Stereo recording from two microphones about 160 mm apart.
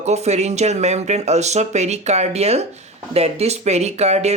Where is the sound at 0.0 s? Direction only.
45° right (ahead or behind).